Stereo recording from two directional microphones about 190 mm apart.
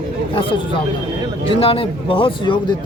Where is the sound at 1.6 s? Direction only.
30° left (ahead or behind).